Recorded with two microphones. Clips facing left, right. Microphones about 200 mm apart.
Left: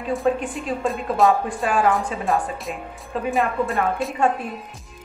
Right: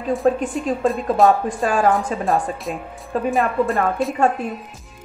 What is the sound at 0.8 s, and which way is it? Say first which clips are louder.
Speech: right 3 dB; centre (ahead or behind).